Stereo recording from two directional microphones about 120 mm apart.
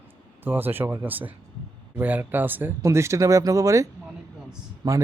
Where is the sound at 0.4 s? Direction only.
15° right (ahead or behind).